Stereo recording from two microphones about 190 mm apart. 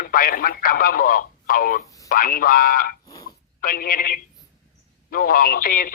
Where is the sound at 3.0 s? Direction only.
20° left (ahead or behind).